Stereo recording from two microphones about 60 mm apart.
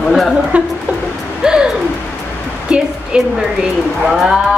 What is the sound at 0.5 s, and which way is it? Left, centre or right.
Speech, right.